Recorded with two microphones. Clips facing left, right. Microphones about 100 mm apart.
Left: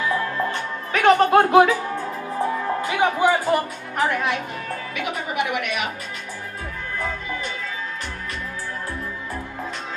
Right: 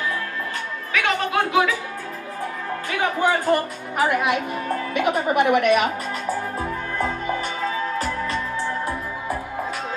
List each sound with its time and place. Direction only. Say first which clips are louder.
0.9 s speech: left 7 dB; 40° left (ahead or behind)
3.2 s speech: right 3 dB; 10° left (ahead or behind)
4.0 s speech: right 2 dB; 10° right (ahead or behind)
4.6 s speech: right 9 dB; 40° right (ahead or behind)